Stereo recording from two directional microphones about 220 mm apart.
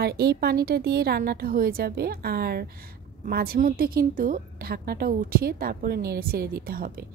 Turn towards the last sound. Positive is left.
turn(degrees=-40)  # may be behind; listen again after turning